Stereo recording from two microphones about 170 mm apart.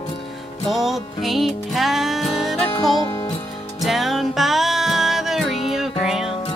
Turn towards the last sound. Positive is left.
turn(degrees=0)  # may be behind; listen again after turning